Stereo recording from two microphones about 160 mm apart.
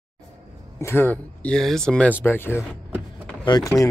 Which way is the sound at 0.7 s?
15° left (ahead or behind).